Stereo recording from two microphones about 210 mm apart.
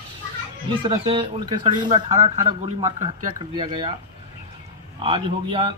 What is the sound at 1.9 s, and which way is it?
Speech, 35° right (ahead or behind).